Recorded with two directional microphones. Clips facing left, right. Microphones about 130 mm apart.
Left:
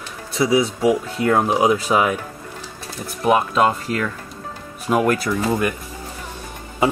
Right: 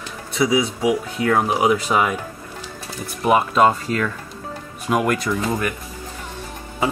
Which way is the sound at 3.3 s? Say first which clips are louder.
Right 1 dB; centre (ahead or behind).